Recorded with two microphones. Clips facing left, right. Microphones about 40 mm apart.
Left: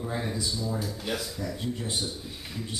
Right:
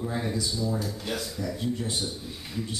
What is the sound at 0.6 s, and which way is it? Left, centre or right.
Speech, centre.